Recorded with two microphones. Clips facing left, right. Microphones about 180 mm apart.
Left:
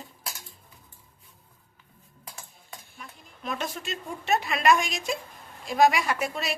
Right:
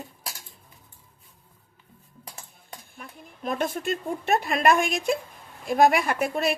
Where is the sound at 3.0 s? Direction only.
55° right (ahead or behind).